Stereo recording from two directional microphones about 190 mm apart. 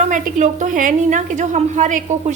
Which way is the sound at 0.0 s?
40° right (ahead or behind).